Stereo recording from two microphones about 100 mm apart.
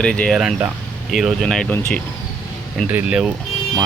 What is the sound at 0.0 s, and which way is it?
Speech, 10° left (ahead or behind).